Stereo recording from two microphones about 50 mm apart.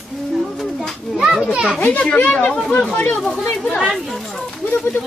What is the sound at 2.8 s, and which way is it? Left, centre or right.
Speech, left.